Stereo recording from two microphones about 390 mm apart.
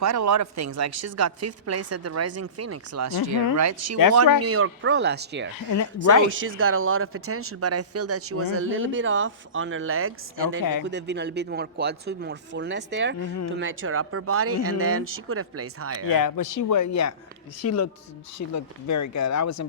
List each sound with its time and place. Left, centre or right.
0.0 s speech: right
5.7 s speech: left
6.6 s speech: right
13.2 s speech: left
13.6 s speech: right
16.1 s speech: left